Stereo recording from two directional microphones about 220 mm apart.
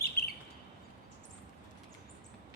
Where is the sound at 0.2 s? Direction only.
45° left (ahead or behind).